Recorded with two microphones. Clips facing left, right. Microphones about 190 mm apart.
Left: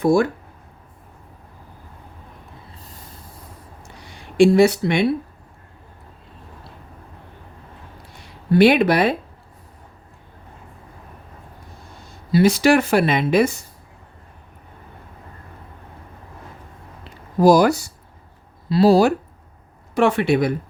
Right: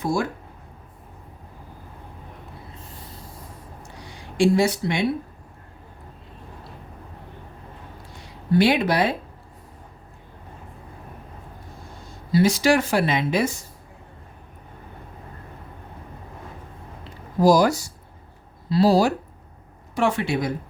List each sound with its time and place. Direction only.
0.0 s speech: 60° left (ahead or behind)
4.4 s speech: 65° left (ahead or behind)
8.5 s speech: 60° left (ahead or behind)
12.3 s speech: 60° left (ahead or behind)
17.4 s speech: 60° left (ahead or behind)